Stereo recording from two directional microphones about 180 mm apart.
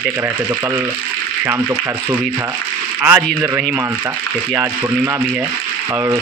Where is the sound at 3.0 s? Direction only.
10° right (ahead or behind).